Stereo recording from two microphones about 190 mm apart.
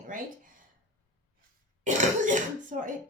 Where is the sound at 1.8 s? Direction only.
40° right (ahead or behind).